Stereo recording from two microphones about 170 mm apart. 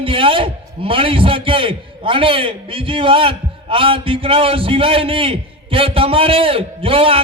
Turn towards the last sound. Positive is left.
turn(degrees=-35)  # may be behind; listen again after turning